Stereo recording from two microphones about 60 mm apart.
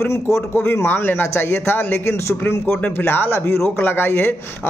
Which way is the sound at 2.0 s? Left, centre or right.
Left.